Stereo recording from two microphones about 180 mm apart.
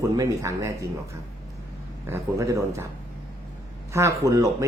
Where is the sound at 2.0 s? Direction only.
15° right (ahead or behind).